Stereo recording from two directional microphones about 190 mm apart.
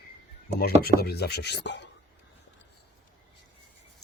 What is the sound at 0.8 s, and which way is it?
Speech, 55° left (ahead or behind).